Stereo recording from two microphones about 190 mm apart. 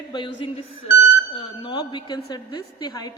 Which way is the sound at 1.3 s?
25° left (ahead or behind).